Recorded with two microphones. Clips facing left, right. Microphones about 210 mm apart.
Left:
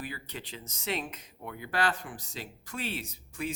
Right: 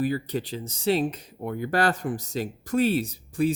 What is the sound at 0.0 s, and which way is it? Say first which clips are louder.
Speech: right 15 dB; 40° right (ahead or behind).